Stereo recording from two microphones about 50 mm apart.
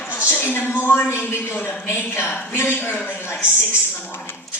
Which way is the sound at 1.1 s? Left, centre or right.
Left.